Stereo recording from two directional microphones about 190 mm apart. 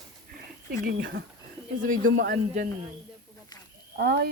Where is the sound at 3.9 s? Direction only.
60° right (ahead or behind).